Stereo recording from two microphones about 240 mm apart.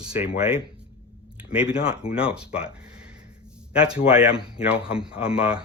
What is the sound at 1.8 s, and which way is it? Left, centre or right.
Speech, centre.